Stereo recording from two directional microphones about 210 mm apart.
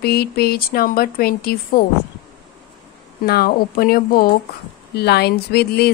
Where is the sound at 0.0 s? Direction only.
50° left (ahead or behind).